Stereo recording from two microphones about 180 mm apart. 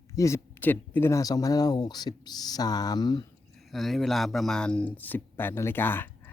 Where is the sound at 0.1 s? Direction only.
15° left (ahead or behind).